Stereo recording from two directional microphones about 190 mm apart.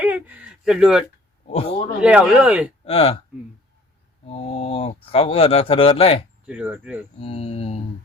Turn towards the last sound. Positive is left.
turn(degrees=30)  # may be behind; listen again after turning